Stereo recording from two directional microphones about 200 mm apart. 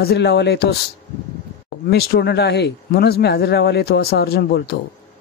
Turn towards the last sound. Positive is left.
turn(degrees=55)  # may be behind; listen again after turning